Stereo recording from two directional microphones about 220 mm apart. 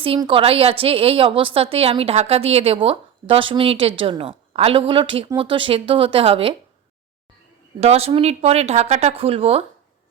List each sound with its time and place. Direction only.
0.0 s a woman's voice: 25° right (ahead or behind)
7.8 s a woman's voice: 30° right (ahead or behind)